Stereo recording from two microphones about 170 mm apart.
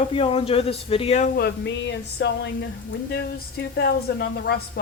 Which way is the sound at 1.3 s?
80° left.